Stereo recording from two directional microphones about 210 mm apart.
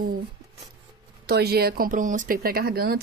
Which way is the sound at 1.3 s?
50° right (ahead or behind).